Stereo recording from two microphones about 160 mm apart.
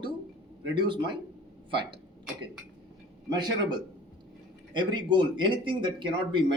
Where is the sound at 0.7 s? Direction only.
30° right (ahead or behind).